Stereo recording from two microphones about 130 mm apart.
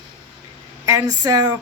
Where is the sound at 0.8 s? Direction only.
25° right (ahead or behind).